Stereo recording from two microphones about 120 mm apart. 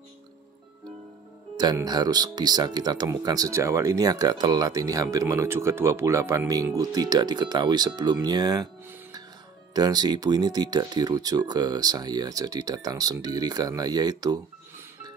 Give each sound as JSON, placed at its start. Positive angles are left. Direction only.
{"t": 1.9, "sound": "speech", "side_deg": -35}
{"t": 9.8, "sound": "speech", "side_deg": -35}